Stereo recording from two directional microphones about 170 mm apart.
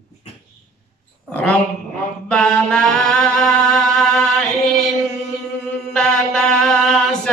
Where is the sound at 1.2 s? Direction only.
10° left (ahead or behind).